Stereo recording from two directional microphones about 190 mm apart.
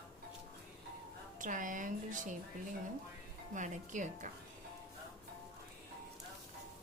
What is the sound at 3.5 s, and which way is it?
Speech, 40° right (ahead or behind).